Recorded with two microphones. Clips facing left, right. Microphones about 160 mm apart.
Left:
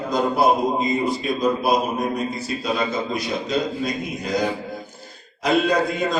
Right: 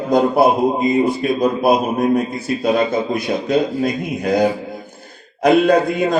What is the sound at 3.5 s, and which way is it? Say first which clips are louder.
A man's voice: right 7 dB; 55° right (ahead or behind).